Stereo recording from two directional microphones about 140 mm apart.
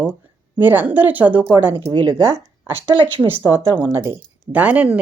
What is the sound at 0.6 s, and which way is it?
Speech, 15° right (ahead or behind).